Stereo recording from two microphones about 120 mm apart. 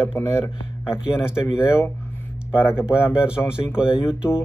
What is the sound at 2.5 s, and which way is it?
Speech, 20° left (ahead or behind).